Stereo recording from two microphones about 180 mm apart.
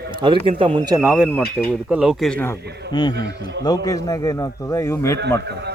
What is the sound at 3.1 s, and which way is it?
Speech, 75° right (ahead or behind).